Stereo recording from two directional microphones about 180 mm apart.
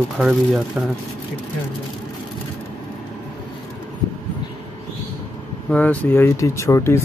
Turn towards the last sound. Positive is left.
turn(degrees=15)  # may be behind; listen again after turning